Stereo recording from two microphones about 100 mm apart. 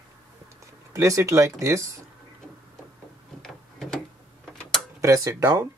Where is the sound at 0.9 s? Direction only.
30° right (ahead or behind).